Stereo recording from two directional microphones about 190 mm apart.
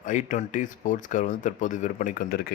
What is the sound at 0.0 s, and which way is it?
Speech, 45° left (ahead or behind).